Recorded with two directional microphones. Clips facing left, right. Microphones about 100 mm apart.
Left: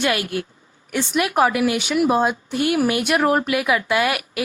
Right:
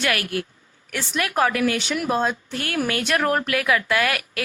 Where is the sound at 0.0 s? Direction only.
20° left (ahead or behind).